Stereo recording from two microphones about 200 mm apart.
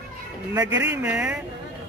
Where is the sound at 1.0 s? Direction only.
5° right (ahead or behind).